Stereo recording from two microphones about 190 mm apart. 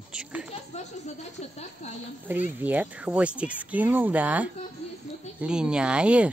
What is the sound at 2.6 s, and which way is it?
Speech, 10° right (ahead or behind).